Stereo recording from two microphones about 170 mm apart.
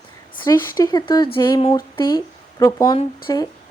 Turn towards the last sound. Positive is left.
turn(degrees=20)  # may be behind; listen again after turning